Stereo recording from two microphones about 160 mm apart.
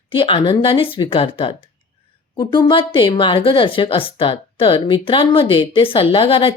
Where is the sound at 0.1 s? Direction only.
30° left (ahead or behind).